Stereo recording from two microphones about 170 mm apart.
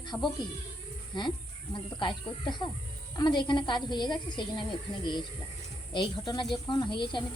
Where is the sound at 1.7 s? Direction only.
30° left (ahead or behind).